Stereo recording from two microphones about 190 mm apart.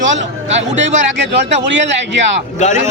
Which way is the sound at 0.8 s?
40° right (ahead or behind).